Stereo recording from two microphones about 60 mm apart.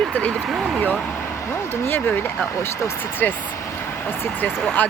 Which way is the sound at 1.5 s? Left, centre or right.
Left.